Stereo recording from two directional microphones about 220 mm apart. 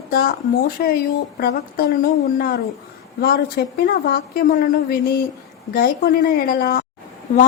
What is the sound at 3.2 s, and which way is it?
A woman's voice, 45° left (ahead or behind).